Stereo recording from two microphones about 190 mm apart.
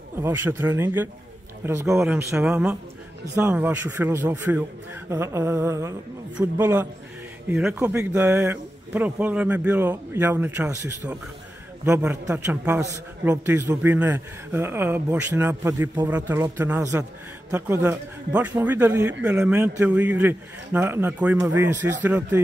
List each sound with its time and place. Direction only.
0.2 s speech: 15° right (ahead or behind)